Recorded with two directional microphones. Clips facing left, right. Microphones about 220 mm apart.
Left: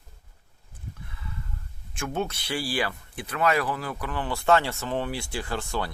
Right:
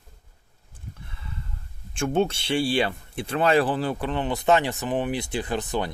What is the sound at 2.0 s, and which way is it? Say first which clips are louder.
Speech: right 7 dB; 30° right (ahead or behind).